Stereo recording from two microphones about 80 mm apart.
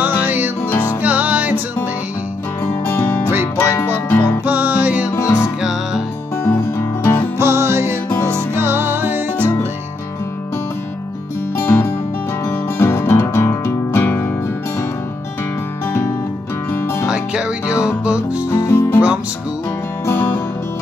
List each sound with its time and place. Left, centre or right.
0.0 s music: right
0.7 s music: left
1.0 s music: right
2.9 s music: left
4.5 s music: right
5.0 s music: left
7.3 s music: right
11.5 s music: left
17.1 s music: centre
18.7 s music: left
20.1 s music: left